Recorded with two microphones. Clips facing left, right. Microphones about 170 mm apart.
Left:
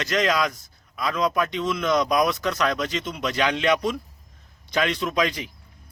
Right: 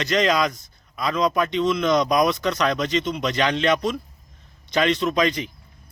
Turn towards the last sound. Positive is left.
turn(degrees=5)  # may be behind; listen again after turning